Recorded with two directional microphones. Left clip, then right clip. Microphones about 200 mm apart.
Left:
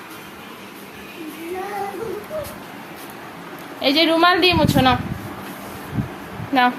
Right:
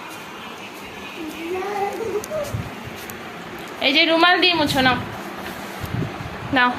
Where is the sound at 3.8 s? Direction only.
10° left (ahead or behind).